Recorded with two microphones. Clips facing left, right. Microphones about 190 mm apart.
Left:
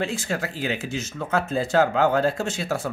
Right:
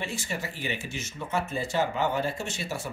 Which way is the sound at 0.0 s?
90° left.